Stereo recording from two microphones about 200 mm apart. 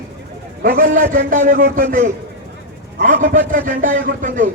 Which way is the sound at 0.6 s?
45° right (ahead or behind).